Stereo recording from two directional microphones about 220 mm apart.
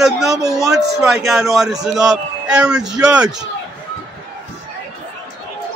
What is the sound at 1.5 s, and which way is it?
Speech, centre (ahead or behind).